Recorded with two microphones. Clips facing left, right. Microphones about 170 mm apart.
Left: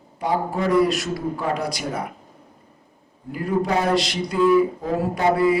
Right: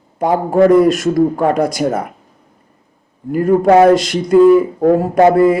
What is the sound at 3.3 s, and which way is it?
Speech, 50° right (ahead or behind).